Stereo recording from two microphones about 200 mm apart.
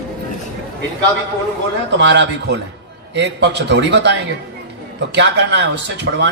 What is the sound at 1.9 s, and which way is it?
Speech, 60° right (ahead or behind).